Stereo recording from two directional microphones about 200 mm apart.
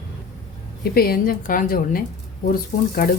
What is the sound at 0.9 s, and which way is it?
A woman's voice, 50° left (ahead or behind).